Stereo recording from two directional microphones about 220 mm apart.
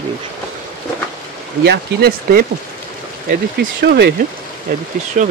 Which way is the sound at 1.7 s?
45° right (ahead or behind).